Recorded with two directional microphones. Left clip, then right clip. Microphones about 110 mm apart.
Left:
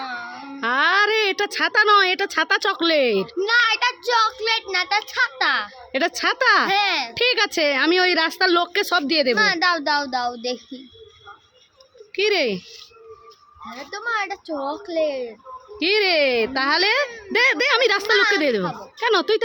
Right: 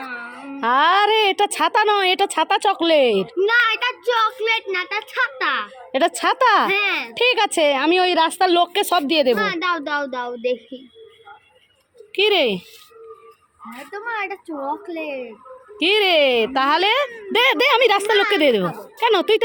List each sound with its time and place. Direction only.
0.0 s wail: 40° left (ahead or behind)
0.6 s a woman's voice: 15° right (ahead or behind)
2.3 s a woman's voice: 5° right (ahead or behind)
3.3 s a child's voice: 40° left (ahead or behind)
5.9 s a woman's voice: 10° right (ahead or behind)
6.7 s a child's voice: 40° left (ahead or behind)
7.2 s a woman's voice: 5° right (ahead or behind)
9.3 s a child's voice: 40° left (ahead or behind)
12.1 s a woman's voice: 15° right (ahead or behind)
13.9 s a child's voice: 35° left (ahead or behind)
15.8 s a woman's voice: 10° right (ahead or behind)
17.3 s a woman's voice: 25° right (ahead or behind)
17.7 s a woman's voice: 10° right (ahead or behind)
18.9 s a woman's voice: 5° right (ahead or behind)